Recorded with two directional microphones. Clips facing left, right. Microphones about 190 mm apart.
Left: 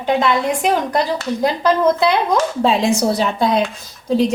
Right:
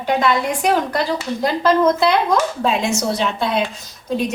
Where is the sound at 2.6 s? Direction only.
35° left (ahead or behind).